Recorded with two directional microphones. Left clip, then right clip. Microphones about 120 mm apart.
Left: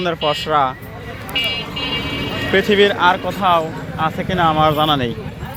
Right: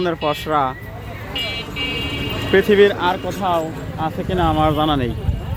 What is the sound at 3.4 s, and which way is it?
Speech, 50° right (ahead or behind).